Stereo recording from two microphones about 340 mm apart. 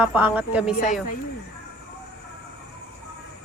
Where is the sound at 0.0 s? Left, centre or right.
Centre.